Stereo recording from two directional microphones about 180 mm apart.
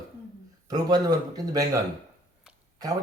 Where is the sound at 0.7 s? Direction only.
20° right (ahead or behind).